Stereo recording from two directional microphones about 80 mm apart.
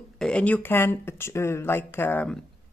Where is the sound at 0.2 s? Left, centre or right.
Centre.